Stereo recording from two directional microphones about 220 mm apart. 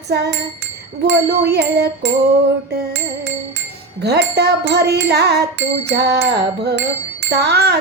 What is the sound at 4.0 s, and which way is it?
Music, 50° right (ahead or behind).